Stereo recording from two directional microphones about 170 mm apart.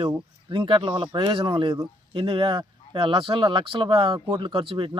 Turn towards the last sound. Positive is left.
turn(degrees=-30)  # may be behind; listen again after turning